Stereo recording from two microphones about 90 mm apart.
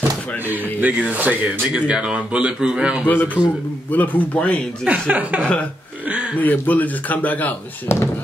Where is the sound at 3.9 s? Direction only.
20° left (ahead or behind).